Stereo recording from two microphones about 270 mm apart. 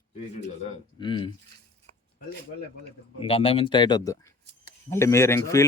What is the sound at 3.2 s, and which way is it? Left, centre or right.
Speech, left.